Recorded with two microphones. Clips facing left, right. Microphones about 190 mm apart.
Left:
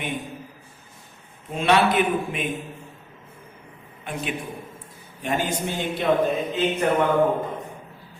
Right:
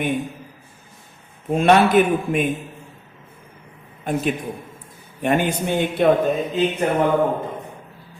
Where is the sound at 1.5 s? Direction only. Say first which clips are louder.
Right 5 dB; 45° right (ahead or behind).